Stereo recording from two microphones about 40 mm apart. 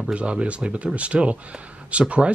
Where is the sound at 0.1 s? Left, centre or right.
Right.